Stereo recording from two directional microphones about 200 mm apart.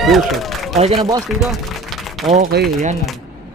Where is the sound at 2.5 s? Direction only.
55° right (ahead or behind).